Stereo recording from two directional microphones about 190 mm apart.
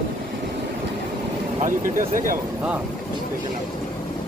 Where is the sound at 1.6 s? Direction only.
45° right (ahead or behind).